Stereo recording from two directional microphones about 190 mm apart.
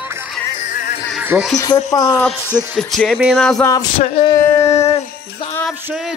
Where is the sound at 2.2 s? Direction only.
5° left (ahead or behind).